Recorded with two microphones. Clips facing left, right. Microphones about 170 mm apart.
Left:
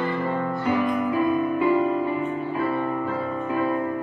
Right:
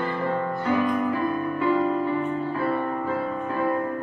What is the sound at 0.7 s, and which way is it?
Music, 15° left (ahead or behind).